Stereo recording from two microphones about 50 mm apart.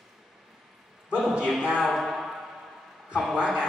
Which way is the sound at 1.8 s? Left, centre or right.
Centre.